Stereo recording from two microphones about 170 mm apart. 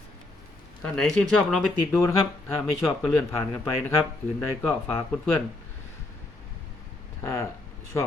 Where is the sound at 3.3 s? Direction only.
15° left (ahead or behind).